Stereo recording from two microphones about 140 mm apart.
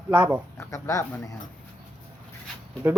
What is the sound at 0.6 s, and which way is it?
Speech, 20° left (ahead or behind).